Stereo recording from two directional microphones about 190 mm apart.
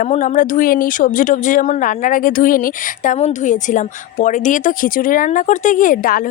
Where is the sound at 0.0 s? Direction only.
40° left (ahead or behind).